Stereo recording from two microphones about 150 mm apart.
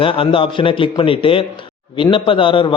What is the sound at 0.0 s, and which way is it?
A man's voice, 35° left (ahead or behind).